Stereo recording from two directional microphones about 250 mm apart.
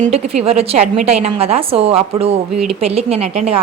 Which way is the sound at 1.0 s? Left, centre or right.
Right.